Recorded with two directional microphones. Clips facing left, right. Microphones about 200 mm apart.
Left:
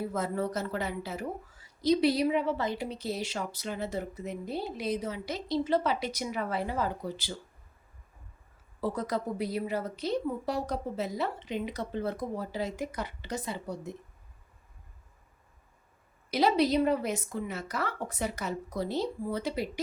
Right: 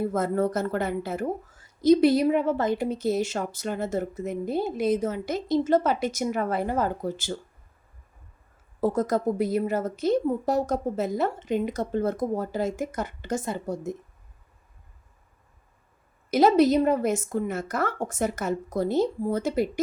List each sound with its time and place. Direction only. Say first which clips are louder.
0.0 s speech: right 7 dB; 50° right (ahead or behind)
8.8 s speech: right 8 dB; 45° right (ahead or behind)
16.3 s speech: right 7 dB; 45° right (ahead or behind)